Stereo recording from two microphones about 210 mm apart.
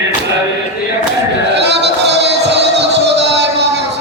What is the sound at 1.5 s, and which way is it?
Music, 55° right (ahead or behind).